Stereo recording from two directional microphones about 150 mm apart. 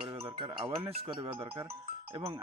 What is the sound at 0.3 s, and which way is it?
Speech, 35° right (ahead or behind).